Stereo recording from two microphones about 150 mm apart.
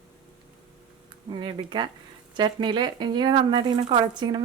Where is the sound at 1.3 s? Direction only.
35° right (ahead or behind).